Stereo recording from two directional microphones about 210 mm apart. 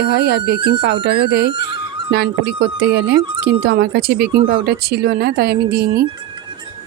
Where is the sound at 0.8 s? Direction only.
50° right (ahead or behind).